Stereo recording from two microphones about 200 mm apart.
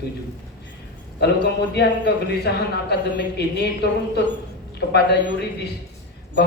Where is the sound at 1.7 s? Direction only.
55° left (ahead or behind).